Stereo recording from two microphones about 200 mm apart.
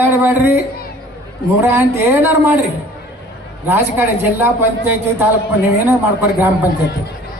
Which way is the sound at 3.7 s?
10° right (ahead or behind).